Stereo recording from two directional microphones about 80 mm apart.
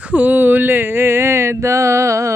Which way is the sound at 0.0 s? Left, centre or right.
Centre.